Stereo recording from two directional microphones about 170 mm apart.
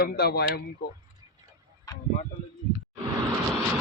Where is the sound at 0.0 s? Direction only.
65° left (ahead or behind).